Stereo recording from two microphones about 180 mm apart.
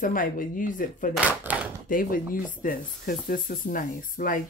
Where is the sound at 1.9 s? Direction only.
50° left (ahead or behind).